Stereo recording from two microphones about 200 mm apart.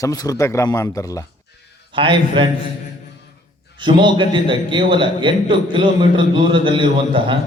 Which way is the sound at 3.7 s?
25° right (ahead or behind).